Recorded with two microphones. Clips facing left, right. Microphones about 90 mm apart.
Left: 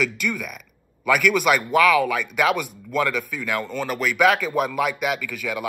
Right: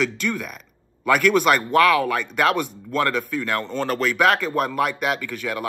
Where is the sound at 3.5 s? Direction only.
10° left (ahead or behind).